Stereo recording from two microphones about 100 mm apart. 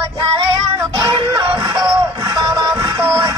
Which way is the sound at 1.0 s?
45° right (ahead or behind).